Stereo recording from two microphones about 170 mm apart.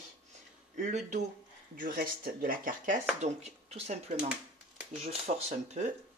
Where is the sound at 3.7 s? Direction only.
40° right (ahead or behind).